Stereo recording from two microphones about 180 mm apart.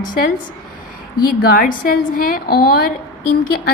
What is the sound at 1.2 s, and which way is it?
A woman's voice, 55° left (ahead or behind).